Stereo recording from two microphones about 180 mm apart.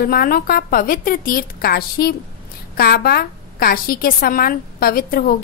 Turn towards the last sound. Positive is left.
turn(degrees=55)  # may be behind; listen again after turning